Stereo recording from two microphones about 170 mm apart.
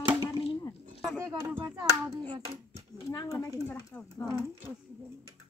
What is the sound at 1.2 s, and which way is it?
Speech, 15° right (ahead or behind).